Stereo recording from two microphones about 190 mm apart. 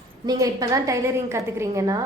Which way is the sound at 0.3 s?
20° right (ahead or behind).